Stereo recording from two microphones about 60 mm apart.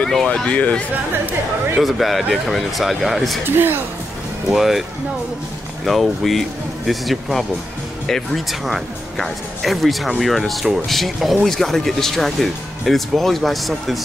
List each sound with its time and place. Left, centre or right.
0.3 s speech: left
1.8 s speech: centre
3.5 s a woman's voice: right
4.5 s speech: centre
5.9 s speech: centre